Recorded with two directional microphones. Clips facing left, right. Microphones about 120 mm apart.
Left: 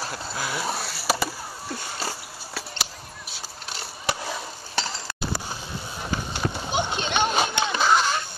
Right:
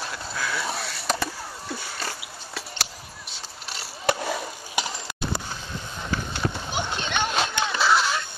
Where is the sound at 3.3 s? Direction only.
Centre (ahead or behind).